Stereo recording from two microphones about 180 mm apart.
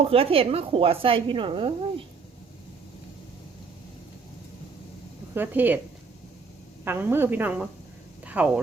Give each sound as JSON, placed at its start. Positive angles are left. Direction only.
{"t": 0.0, "sound": "speech", "side_deg": -30}
{"t": 5.3, "sound": "a woman's voice", "side_deg": -10}
{"t": 6.8, "sound": "a woman's voice", "side_deg": -10}
{"t": 8.2, "sound": "a sound", "side_deg": -10}